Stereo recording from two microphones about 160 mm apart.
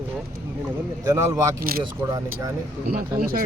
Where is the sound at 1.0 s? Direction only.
20° right (ahead or behind).